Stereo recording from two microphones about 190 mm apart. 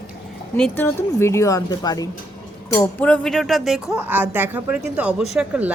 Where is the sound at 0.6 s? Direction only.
10° left (ahead or behind); by 5.7 s 5° right (ahead or behind).